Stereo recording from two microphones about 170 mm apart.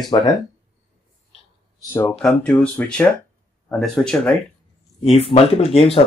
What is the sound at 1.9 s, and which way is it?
Speech, 10° left (ahead or behind).